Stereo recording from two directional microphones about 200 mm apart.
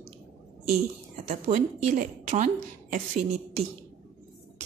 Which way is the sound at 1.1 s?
35° right (ahead or behind).